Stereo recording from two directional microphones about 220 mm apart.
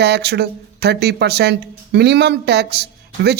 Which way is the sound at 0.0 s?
50° right (ahead or behind).